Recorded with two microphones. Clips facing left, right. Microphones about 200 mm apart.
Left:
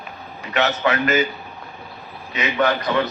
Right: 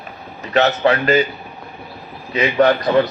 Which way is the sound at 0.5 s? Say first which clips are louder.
Right 5 dB; 35° right (ahead or behind).